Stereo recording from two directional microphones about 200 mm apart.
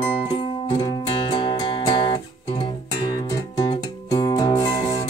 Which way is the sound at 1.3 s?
25° left (ahead or behind).